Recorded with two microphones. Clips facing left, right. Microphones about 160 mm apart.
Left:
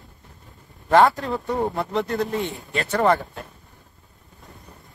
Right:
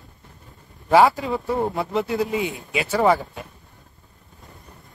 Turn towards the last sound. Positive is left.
turn(degrees=-5)  # may be behind; listen again after turning